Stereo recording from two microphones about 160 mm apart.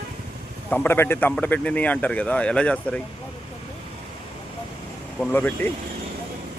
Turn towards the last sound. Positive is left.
turn(degrees=10)  # may be behind; listen again after turning